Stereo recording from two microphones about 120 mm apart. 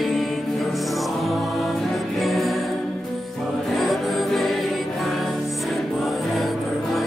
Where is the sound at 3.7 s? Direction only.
Centre (ahead or behind).